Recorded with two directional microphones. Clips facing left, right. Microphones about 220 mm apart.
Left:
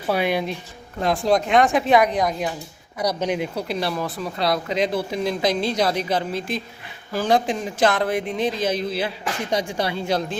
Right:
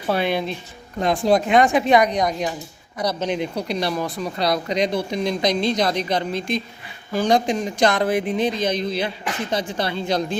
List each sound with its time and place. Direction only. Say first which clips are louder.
0.1 s speech: even; 10° left (ahead or behind)
0.9 s speech: right 2 dB; centre (ahead or behind)